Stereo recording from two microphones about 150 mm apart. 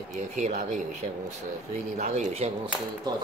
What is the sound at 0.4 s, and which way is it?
Speech, 55° right (ahead or behind).